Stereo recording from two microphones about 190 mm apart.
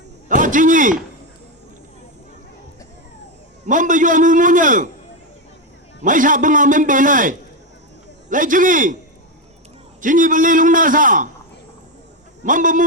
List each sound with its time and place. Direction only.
0.3 s a man's voice: 45° right (ahead or behind)
3.7 s a man's voice: 40° right (ahead or behind)
6.0 s a man's voice: 45° right (ahead or behind)
10.0 s a man's voice: 45° right (ahead or behind)
12.5 s a man's voice: 45° right (ahead or behind)